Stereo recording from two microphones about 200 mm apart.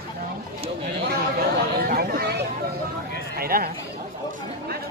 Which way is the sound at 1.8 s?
50° right (ahead or behind).